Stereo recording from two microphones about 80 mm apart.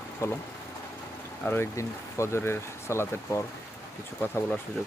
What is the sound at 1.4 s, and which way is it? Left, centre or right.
Speech, left.